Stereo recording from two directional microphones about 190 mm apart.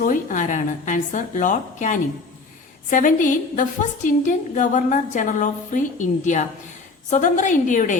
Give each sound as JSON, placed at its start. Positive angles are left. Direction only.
{"t": 0.0, "sound": "a woman's voice", "side_deg": 45}